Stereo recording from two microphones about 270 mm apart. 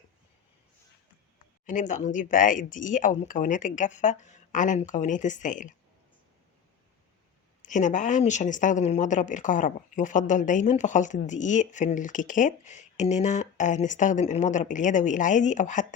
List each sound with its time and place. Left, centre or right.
1.6 s speech: left
7.6 s speech: left